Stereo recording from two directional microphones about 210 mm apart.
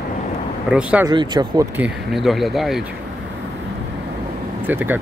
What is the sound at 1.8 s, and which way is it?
Speech, centre (ahead or behind).